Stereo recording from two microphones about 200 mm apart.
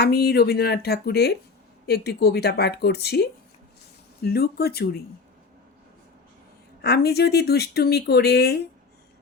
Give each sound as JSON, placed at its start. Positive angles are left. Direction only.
{"t": 0.0, "sound": "speech", "side_deg": 50}
{"t": 6.8, "sound": "speech", "side_deg": 50}